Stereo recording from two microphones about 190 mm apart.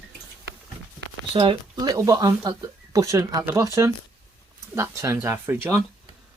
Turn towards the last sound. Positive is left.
turn(degrees=-10)  # may be behind; listen again after turning